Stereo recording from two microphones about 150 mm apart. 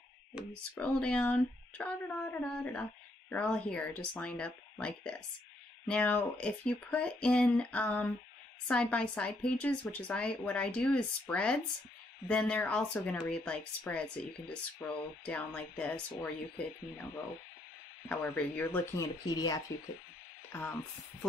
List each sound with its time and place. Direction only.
0.7 s speech: 10° left (ahead or behind)
18.0 s speech: 10° left (ahead or behind)
19.2 s speech: 25° left (ahead or behind)